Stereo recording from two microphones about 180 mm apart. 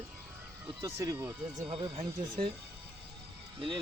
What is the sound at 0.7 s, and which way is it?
Speech, 20° right (ahead or behind).